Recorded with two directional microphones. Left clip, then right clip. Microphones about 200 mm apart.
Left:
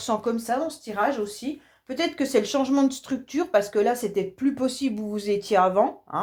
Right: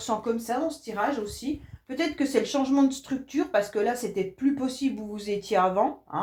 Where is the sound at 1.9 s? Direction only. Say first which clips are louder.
Left 3 dB; 45° left (ahead or behind).